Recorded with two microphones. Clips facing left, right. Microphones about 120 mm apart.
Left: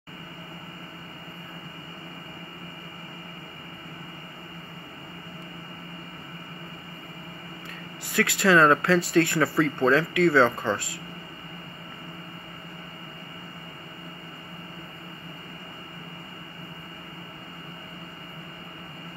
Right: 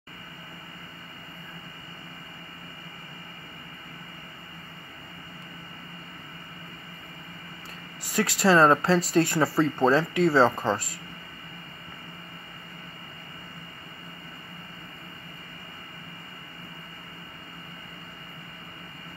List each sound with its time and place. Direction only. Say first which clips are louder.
8.4 s speech: even; 35° right (ahead or behind)